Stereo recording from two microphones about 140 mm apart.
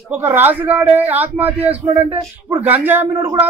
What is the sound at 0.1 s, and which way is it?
A man's voice, 15° right (ahead or behind).